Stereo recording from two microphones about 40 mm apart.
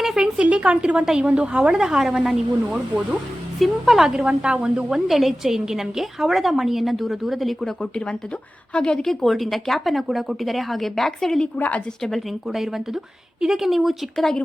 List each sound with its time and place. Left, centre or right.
0.0 s a sound: centre
0.5 s a woman's voice: right
1.8 s speech: centre
2.6 s a woman's voice: right
3.6 s speech: centre
4.3 s a woman's voice: right
5.0 s a woman's voice: centre
7.6 s speech: centre
9.0 s a woman's voice: centre
11.5 s a woman's voice: left
12.1 s a woman's voice: centre